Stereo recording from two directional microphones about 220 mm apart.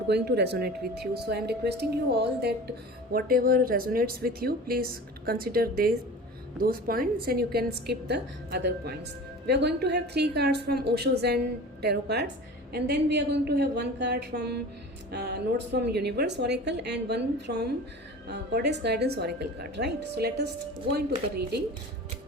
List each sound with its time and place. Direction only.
0.1 s speech: 50° right (ahead or behind)